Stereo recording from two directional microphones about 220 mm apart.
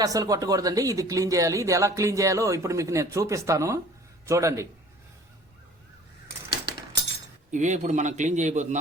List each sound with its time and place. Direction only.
0.0 s speech: 15° right (ahead or behind)
7.5 s a man's voice: 35° right (ahead or behind)